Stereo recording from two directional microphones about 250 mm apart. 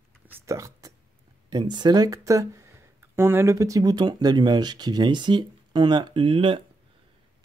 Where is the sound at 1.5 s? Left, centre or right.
Centre.